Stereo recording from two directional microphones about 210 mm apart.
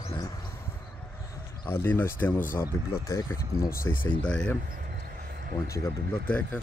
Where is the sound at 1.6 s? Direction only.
10° left (ahead or behind).